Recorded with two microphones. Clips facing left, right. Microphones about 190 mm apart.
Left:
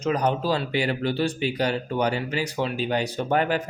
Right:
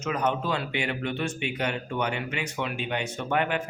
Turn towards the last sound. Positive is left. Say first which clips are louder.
# left 4 dB
turn(degrees=35)  # may be behind; listen again after turning